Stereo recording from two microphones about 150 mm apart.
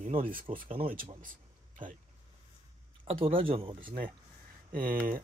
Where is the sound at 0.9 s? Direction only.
65° right (ahead or behind).